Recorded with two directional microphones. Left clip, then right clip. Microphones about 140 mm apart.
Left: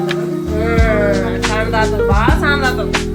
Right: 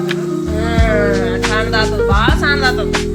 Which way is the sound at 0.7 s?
25° right (ahead or behind).